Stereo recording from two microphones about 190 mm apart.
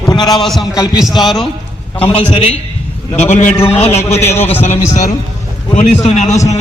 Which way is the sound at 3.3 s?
35° left (ahead or behind).